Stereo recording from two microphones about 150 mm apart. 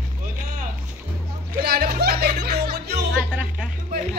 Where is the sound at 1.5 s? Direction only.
90° right.